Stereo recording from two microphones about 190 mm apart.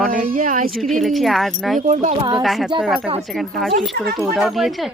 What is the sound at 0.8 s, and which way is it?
Speech, centre (ahead or behind).